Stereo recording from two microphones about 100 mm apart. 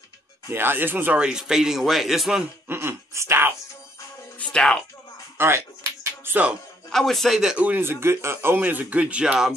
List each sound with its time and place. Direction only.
0.5 s a man's voice: 20° right (ahead or behind); by 2.4 s centre (ahead or behind)
2.4 s speech: 20° right (ahead or behind)
4.4 s music: 10° left (ahead or behind)
5.4 s speech: 20° right (ahead or behind)
6.2 s music: 15° right (ahead or behind)
6.9 s a man's voice: centre (ahead or behind)